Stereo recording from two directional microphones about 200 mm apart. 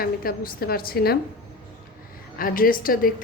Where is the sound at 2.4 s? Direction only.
45° left (ahead or behind).